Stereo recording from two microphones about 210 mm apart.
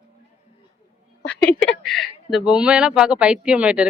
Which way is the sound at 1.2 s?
50° left (ahead or behind).